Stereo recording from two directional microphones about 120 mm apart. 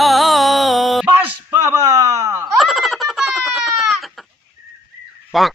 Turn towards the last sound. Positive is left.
turn(degrees=0)  # may be behind; listen again after turning